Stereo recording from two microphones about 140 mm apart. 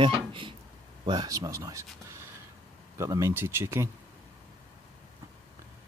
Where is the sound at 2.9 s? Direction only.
20° right (ahead or behind).